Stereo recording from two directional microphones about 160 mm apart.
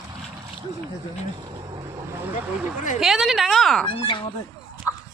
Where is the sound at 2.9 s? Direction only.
Centre (ahead or behind).